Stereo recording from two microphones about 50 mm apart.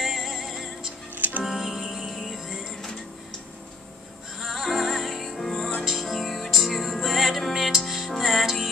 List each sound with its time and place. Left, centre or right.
0.0 s music: centre
1.1 s music: right
1.4 s music: centre
4.4 s music: centre